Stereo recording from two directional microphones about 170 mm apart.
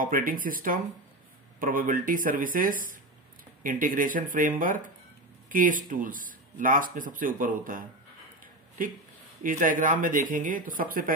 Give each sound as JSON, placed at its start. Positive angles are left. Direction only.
{"t": 0.0, "sound": "speech", "side_deg": -55}
{"t": 9.4, "sound": "speech", "side_deg": -50}